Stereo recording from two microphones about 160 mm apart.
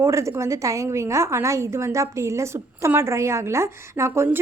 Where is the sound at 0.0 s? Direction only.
20° right (ahead or behind).